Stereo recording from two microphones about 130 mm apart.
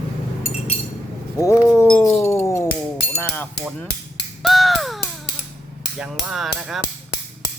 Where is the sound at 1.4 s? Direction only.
20° left (ahead or behind).